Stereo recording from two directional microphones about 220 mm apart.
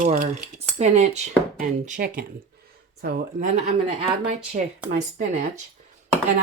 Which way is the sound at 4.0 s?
25° right (ahead or behind).